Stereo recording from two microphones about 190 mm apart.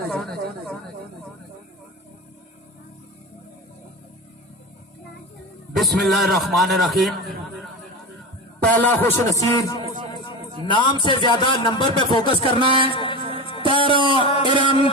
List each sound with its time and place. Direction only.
0.1 s speech: 5° left (ahead or behind)
5.7 s a man's voice: centre (ahead or behind)
8.7 s a man's voice: 10° left (ahead or behind); by 12.5 s 25° left (ahead or behind)
12.5 s a man's voice: 25° right (ahead or behind)
12.9 s speech: 25° left (ahead or behind)
13.1 s music: 25° right (ahead or behind)
14.2 s a sound: 25° left (ahead or behind)
14.5 s a sound: 25° right (ahead or behind)